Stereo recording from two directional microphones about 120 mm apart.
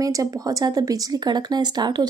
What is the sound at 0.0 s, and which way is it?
Speech, 30° right (ahead or behind).